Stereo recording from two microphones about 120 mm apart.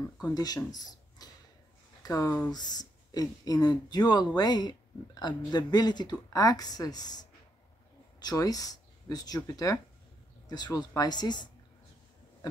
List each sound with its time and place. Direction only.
0.3 s speech: 35° left (ahead or behind)
2.2 s speech: 10° left (ahead or behind)
2.5 s speech: 35° left (ahead or behind)